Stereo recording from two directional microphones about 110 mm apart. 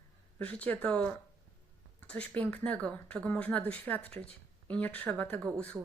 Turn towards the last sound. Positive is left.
turn(degrees=10)  # may be behind; listen again after turning